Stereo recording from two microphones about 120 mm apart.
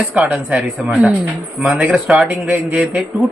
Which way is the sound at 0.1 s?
10° right (ahead or behind).